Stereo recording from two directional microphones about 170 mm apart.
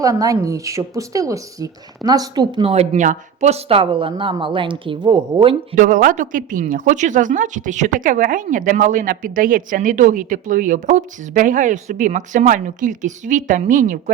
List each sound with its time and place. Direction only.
0.0 s a woman's voice: 20° right (ahead or behind)
5.7 s a woman's voice: 50° right (ahead or behind)